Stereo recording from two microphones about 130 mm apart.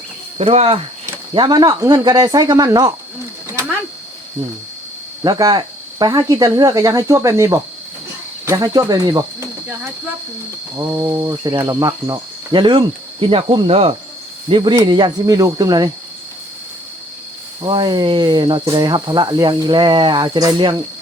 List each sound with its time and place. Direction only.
0.3 s speech: 50° right (ahead or behind)
1.3 s cricket: 35° right (ahead or behind)
5.2 s cricket: 30° right (ahead or behind)
10.8 s cricket: 20° right (ahead or behind)
11.4 s cricket: 30° right (ahead or behind); by 13.9 s 50° right (ahead or behind)
14.5 s cricket: 35° right (ahead or behind)
17.6 s cricket: 35° right (ahead or behind)